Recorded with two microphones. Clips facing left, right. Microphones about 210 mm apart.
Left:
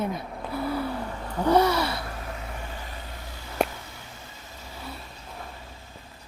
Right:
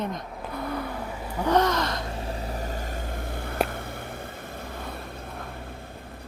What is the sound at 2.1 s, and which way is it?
Vehicle, 30° right (ahead or behind).